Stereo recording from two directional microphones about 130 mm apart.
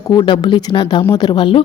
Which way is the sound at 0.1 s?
35° left (ahead or behind).